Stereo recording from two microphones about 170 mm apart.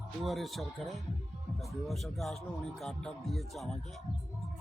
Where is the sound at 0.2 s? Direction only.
Centre (ahead or behind).